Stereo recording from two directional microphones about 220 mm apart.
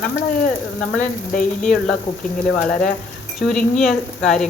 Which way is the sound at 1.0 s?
35° left (ahead or behind).